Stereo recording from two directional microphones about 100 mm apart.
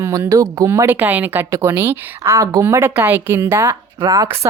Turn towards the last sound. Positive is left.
turn(degrees=-40)  # may be behind; listen again after turning